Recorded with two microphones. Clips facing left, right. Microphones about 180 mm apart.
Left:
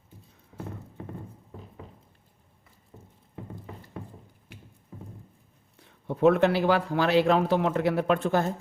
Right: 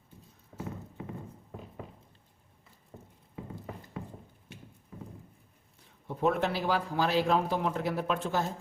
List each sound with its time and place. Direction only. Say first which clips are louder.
6.1 s speech: left 8 dB; 70° left (ahead or behind)